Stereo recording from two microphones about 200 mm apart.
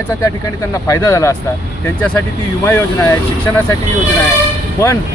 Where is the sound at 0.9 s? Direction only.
15° left (ahead or behind).